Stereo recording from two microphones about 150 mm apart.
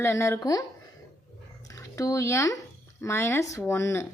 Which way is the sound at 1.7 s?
20° left (ahead or behind).